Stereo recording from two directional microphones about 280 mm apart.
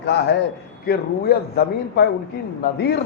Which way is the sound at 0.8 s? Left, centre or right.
Left.